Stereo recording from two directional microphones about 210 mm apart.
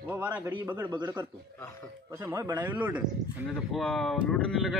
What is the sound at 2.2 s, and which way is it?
Speech, 10° right (ahead or behind).